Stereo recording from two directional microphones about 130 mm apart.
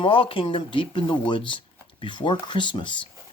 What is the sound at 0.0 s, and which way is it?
Speech, 45° left (ahead or behind).